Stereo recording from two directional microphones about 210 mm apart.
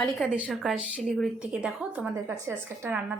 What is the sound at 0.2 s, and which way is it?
A woman's voice, 5° right (ahead or behind).